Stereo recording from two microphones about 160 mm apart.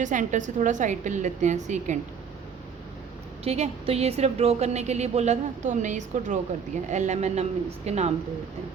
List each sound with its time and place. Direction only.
0.0 s a woman's voice: 50° right (ahead or behind)
3.4 s a woman's voice: 40° right (ahead or behind)